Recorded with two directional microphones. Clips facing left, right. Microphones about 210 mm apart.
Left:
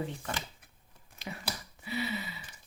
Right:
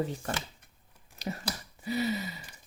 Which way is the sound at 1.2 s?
40° right (ahead or behind).